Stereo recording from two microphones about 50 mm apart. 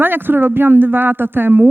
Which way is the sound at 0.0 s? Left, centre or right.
Right.